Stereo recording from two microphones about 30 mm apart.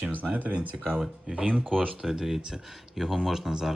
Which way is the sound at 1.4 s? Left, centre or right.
Right.